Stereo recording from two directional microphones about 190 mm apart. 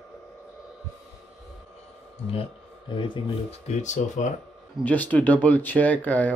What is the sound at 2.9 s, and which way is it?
Speech, 25° left (ahead or behind).